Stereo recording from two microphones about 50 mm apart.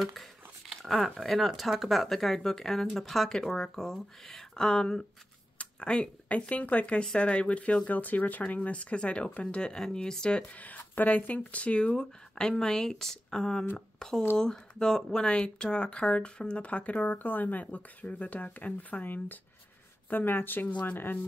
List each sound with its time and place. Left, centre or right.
0.0 s speech: centre
10.5 s speech: left
12.0 s speech: centre; by 21.2 s left